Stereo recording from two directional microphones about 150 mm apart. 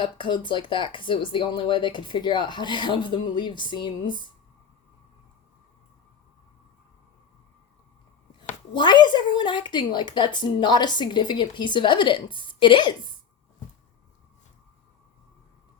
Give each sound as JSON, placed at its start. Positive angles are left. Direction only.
{"t": 0.0, "sound": "a woman's voice", "side_deg": 30}
{"t": 8.7, "sound": "a woman's voice", "side_deg": 30}